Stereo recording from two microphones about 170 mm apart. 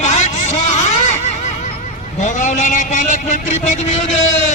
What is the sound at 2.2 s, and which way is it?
A man's voice, 45° left (ahead or behind).